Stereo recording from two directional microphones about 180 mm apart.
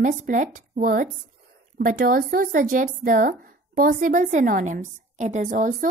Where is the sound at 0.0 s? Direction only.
45° right (ahead or behind).